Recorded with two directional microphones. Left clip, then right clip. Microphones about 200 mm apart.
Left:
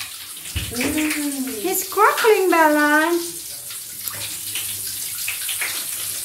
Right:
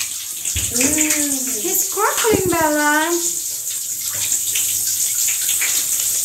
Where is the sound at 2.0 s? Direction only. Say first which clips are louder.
Left 3 dB; 5° left (ahead or behind).